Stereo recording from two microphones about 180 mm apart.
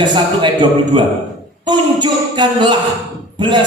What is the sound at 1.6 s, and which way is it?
Speech, 25° right (ahead or behind).